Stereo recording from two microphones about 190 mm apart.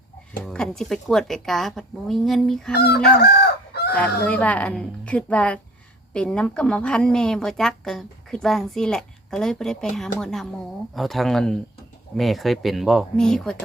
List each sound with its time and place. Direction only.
0.4 s a woman's voice: 5° left (ahead or behind)
2.7 s chicken: 55° left (ahead or behind)
3.9 s a woman's voice: 5° left (ahead or behind)